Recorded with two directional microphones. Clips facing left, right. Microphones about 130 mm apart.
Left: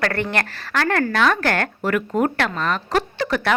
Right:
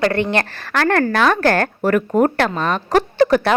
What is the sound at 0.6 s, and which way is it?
Speech, 50° right (ahead or behind).